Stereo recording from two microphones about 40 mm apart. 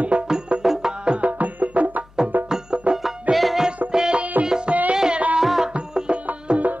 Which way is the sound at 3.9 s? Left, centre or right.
Centre.